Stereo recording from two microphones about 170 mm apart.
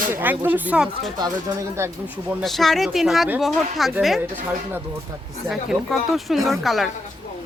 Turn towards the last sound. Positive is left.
turn(degrees=0)  # may be behind; listen again after turning